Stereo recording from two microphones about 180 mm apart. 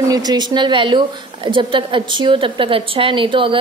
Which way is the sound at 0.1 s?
20° right (ahead or behind).